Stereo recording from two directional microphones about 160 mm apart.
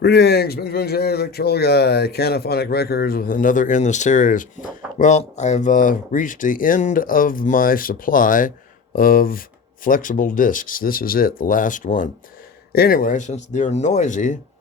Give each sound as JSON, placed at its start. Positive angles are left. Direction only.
{"t": 0.0, "sound": "a man's voice", "side_deg": 90}
{"t": 12.7, "sound": "speech", "side_deg": 70}